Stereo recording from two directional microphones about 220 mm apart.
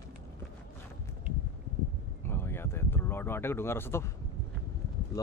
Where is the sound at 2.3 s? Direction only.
10° left (ahead or behind).